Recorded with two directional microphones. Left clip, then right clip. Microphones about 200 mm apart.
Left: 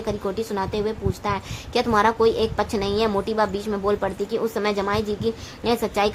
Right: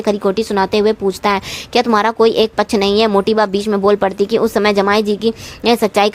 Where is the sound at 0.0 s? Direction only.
40° right (ahead or behind).